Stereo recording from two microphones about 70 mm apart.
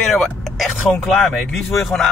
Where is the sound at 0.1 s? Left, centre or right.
Centre.